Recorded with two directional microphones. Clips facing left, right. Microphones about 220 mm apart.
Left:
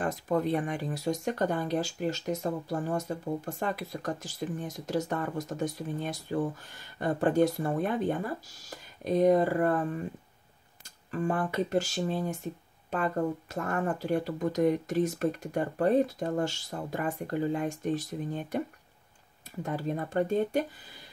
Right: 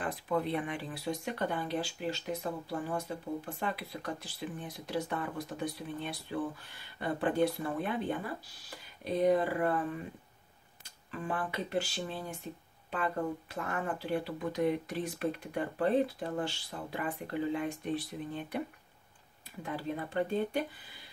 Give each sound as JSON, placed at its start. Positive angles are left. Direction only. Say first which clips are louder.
{"t": 0.0, "sound": "speech", "louder": "left 4 dB", "side_deg": 45}
{"t": 19.6, "sound": "speech", "louder": "left 4 dB", "side_deg": 45}